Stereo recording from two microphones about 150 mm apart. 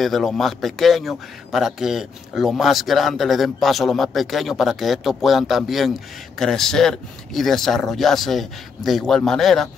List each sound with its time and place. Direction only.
0.0 s a man's voice: centre (ahead or behind)